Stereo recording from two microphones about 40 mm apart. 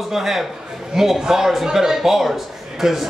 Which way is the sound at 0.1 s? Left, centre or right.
Centre.